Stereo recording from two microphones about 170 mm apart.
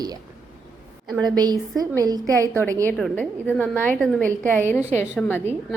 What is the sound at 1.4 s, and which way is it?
A woman's voice, 20° right (ahead or behind).